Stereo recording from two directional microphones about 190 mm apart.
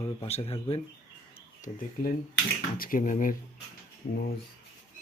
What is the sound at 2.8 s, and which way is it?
Speech, 45° left (ahead or behind).